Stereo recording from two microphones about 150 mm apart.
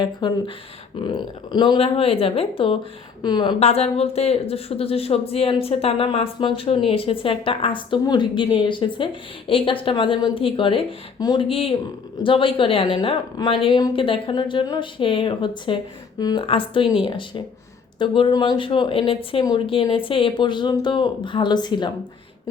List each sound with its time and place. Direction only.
0.0 s a woman's voice: 30° left (ahead or behind)
3.6 s a woman's voice: 45° left (ahead or behind)